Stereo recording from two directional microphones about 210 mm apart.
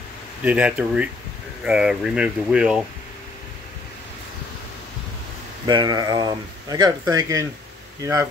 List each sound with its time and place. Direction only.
0.4 s speech: 5° right (ahead or behind)
5.7 s speech: 20° right (ahead or behind)